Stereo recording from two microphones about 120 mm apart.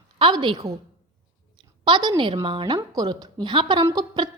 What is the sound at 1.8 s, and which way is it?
A woman's voice, 40° right (ahead or behind).